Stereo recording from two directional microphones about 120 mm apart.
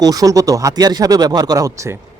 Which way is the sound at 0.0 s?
30° right (ahead or behind).